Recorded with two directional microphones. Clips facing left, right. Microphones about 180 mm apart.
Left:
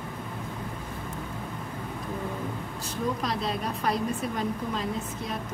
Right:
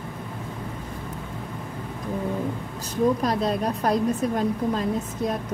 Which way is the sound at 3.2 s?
45° right (ahead or behind).